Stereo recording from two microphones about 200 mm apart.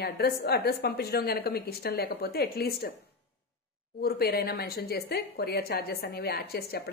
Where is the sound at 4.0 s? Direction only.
50° left (ahead or behind).